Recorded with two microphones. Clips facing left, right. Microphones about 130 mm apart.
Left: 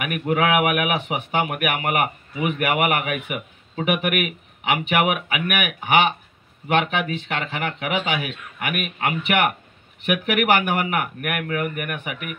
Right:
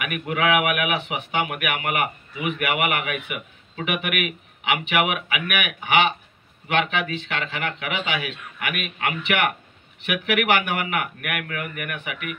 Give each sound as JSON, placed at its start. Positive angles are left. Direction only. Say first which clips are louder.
{"t": 0.0, "sound": "speech", "louder": "left 3 dB", "side_deg": 40}